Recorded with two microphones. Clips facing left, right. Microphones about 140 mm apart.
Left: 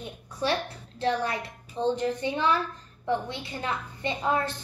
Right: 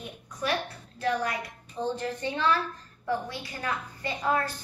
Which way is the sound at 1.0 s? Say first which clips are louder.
Left 1 dB; 30° left (ahead or behind).